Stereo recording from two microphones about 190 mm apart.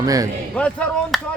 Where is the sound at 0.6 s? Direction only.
5° left (ahead or behind).